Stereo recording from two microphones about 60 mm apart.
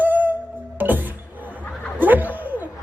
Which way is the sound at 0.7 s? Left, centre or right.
Right.